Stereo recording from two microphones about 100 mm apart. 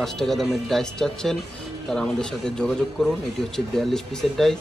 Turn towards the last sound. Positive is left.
turn(degrees=5)  # may be behind; listen again after turning